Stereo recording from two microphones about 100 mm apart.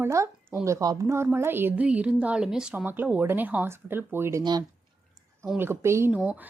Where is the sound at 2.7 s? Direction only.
20° right (ahead or behind).